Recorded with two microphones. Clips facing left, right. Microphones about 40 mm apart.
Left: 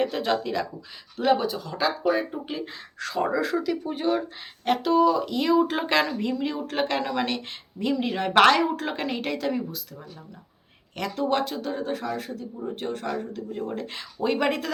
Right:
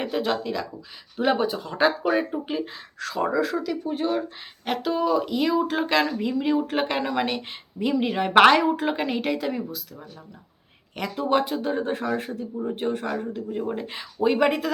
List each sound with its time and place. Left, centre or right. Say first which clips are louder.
0.0 s speech: left 1 dB; centre
1.1 s speech: even; centre
2.3 s speech: right 4 dB; centre
10.9 s speech: right 2 dB; centre; by 12.5 s right
12.5 s speech: right 5 dB; centre